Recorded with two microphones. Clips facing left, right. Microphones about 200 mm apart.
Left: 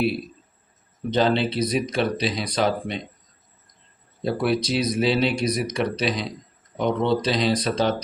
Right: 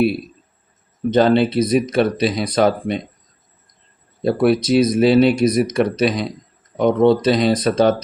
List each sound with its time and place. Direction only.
1.1 s speech: 50° right (ahead or behind)
4.2 s speech: 50° right (ahead or behind)